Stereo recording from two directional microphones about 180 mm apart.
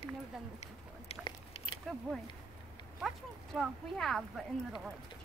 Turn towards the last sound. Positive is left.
turn(degrees=0)  # may be behind; listen again after turning